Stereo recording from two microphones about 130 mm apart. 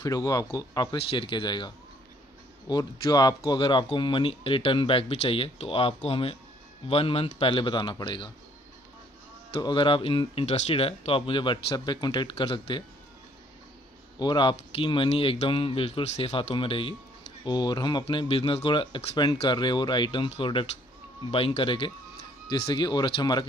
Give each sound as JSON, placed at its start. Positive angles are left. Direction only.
{"t": 0.0, "sound": "speech", "side_deg": 25}
{"t": 2.7, "sound": "speech", "side_deg": 30}
{"t": 9.6, "sound": "speech", "side_deg": 40}
{"t": 14.1, "sound": "speech", "side_deg": 35}